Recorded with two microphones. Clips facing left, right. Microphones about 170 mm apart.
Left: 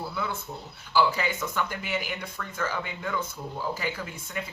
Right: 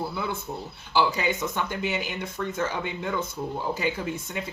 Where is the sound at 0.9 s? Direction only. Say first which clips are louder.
Right 1 dB; 20° right (ahead or behind).